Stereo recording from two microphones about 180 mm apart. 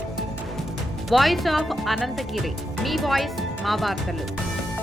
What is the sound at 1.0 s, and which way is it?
Speech, centre (ahead or behind).